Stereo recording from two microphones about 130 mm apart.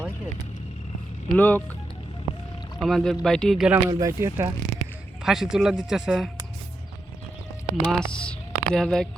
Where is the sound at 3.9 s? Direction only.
25° right (ahead or behind).